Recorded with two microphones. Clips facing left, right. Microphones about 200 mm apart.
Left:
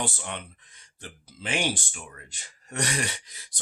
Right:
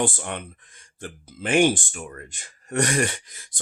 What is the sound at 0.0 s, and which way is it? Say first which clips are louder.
Speech: right 7 dB; 50° right (ahead or behind).